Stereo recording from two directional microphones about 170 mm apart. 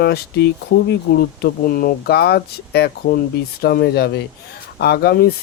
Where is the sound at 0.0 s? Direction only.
70° left (ahead or behind).